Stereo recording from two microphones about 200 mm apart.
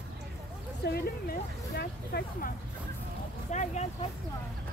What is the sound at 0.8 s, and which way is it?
Speech, 50° left (ahead or behind).